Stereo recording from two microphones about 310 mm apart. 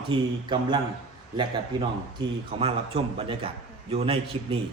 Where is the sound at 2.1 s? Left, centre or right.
Centre.